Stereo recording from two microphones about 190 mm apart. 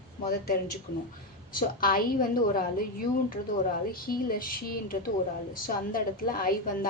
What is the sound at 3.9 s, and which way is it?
A woman's voice, 50° left (ahead or behind).